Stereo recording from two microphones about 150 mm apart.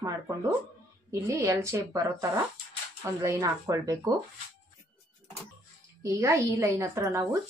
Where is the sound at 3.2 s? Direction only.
20° right (ahead or behind).